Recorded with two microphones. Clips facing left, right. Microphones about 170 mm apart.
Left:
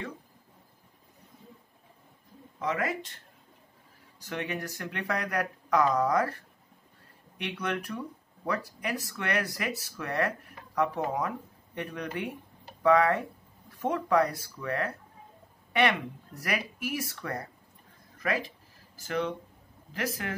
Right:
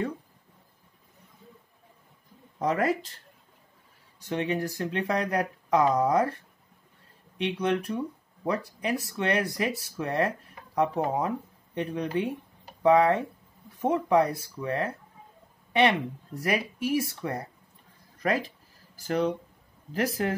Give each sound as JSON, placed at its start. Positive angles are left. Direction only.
{"t": 2.6, "sound": "speech", "side_deg": -35}
{"t": 4.2, "sound": "speech", "side_deg": -25}
{"t": 18.9, "sound": "speech", "side_deg": -35}